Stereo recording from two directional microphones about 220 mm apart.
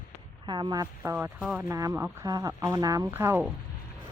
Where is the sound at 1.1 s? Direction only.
Centre (ahead or behind).